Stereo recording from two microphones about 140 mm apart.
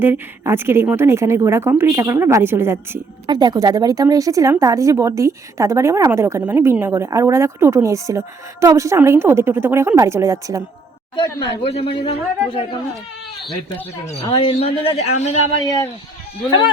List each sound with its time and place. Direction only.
0.0 s a woman's voice: 15° right (ahead or behind)
3.2 s a woman's voice: 30° right (ahead or behind)
11.2 s speech: 45° left (ahead or behind)
14.3 s speech: 40° left (ahead or behind)